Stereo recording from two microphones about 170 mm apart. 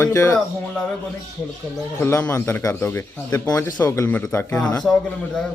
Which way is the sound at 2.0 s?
15° left (ahead or behind).